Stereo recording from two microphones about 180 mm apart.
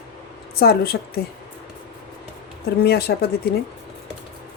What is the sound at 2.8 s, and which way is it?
Speech, 60° left (ahead or behind).